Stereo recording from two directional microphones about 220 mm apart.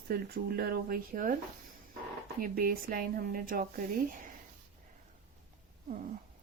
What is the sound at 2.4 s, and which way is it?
Speech, 40° right (ahead or behind).